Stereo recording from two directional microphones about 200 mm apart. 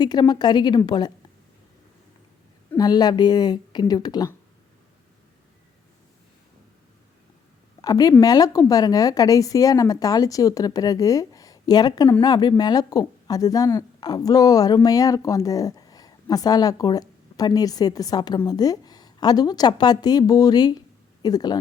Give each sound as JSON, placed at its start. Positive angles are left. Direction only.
{"t": 0.0, "sound": "a woman's voice", "side_deg": 20}
{"t": 2.7, "sound": "a woman's voice", "side_deg": 20}
{"t": 7.8, "sound": "a woman's voice", "side_deg": 20}